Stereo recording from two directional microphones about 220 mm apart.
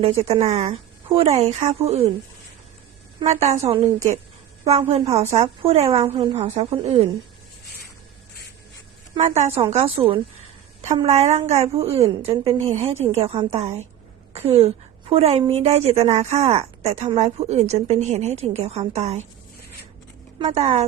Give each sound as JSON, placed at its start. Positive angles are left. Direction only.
{"t": 0.3, "sound": "a woman's voice", "side_deg": -30}
{"t": 3.2, "sound": "a woman's voice", "side_deg": -30}
{"t": 9.1, "sound": "a woman's voice", "side_deg": -30}
{"t": 12.5, "sound": "a woman's voice", "side_deg": -15}
{"t": 13.1, "sound": "a woman's voice", "side_deg": -25}
{"t": 20.4, "sound": "a woman's voice", "side_deg": -30}